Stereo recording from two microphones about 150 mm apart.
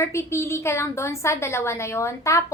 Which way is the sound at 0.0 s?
15° left (ahead or behind).